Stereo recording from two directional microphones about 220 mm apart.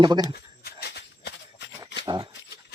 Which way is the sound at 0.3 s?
45° left (ahead or behind).